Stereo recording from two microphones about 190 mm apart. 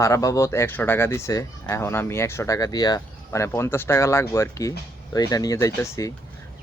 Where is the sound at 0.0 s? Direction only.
15° left (ahead or behind).